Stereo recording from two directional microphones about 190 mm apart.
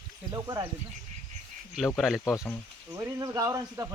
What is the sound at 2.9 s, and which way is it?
Speech, 15° right (ahead or behind).